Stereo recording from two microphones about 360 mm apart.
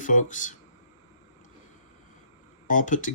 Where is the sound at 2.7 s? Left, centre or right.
Left.